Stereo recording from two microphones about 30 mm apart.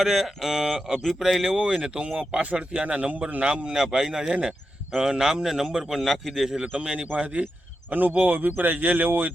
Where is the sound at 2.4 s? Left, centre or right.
Right.